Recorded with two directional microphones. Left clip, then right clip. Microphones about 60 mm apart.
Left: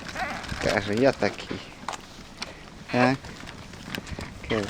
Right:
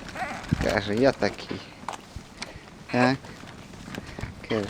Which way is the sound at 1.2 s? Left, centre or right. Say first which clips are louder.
Even; right.